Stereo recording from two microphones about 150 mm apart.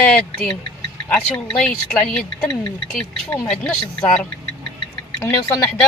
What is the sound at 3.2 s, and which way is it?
Speech, 20° left (ahead or behind).